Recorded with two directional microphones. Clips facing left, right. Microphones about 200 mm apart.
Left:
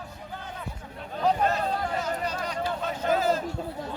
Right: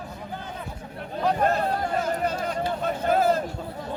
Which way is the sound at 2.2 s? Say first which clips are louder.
Right 4 dB; 50° right (ahead or behind).